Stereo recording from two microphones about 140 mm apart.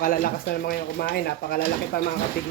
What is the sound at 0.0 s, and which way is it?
Speech, 90° left.